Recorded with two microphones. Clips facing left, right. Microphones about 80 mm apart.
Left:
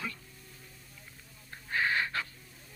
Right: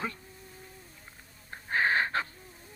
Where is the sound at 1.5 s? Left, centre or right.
Right.